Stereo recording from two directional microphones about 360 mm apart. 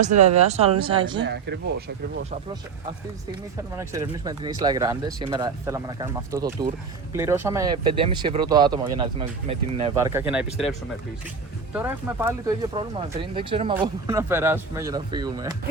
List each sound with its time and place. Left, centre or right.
0.0 s speech: centre
1.2 s speech: right
3.8 s speech: centre
11.7 s speech: centre